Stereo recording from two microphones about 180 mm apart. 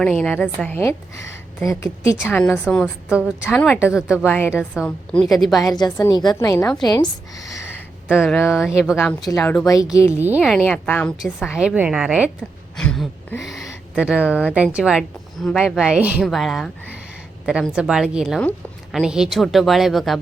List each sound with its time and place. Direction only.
0.0 s a woman's voice: 5° left (ahead or behind)
3.1 s a woman's voice: 5° right (ahead or behind)
4.3 s a woman's voice: 10° left (ahead or behind)
5.7 s a woman's voice: 25° left (ahead or behind)
8.1 s a woman's voice: centre (ahead or behind)
8.4 s a woman's voice: 15° left (ahead or behind)
9.0 s a woman's voice: centre (ahead or behind)
10.2 s speech: 10° right (ahead or behind)
10.4 s a woman's voice: centre (ahead or behind)